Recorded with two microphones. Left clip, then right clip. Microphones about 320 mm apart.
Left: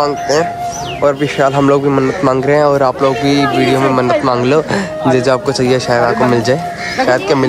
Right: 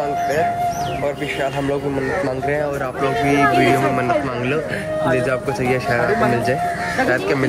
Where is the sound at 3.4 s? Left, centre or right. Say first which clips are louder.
Left 1 dB; centre.